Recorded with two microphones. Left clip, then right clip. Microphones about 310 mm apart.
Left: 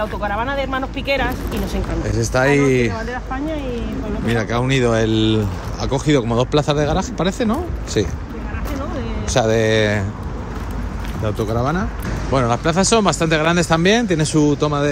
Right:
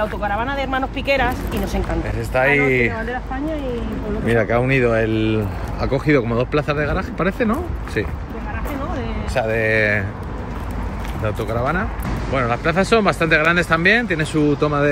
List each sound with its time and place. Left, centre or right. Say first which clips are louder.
0.0 s speech: even; centre
2.1 s speech: left 1 dB; centre
4.3 s speech: right 3 dB; centre
9.3 s speech: left 3 dB; left
9.7 s speech: even; centre
11.2 s speech: left 1 dB; centre